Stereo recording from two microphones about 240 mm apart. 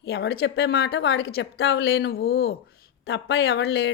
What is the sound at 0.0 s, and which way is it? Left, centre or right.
A woman's voice, left.